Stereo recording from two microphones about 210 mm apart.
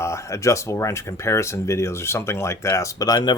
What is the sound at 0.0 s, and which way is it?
Speech, 15° left (ahead or behind).